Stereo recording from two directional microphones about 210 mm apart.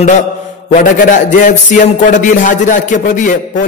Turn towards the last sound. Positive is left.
turn(degrees=40)  # may be behind; listen again after turning